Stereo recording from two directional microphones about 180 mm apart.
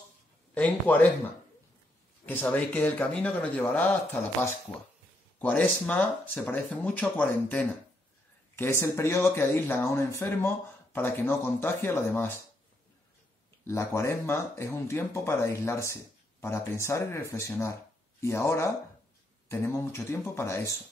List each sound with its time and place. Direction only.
0.6 s speech: 10° left (ahead or behind)
2.2 s speech: 10° left (ahead or behind)
13.7 s speech: 15° left (ahead or behind)